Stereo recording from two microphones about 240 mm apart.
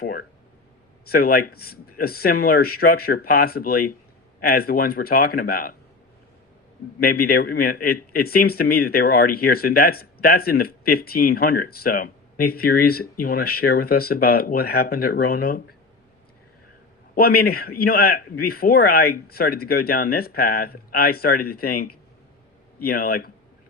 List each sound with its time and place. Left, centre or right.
0.0 s speech: left
7.1 s speech: left
17.2 s speech: left